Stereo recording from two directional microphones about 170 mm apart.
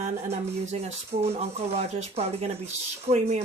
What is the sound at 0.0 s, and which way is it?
Speech, 40° right (ahead or behind).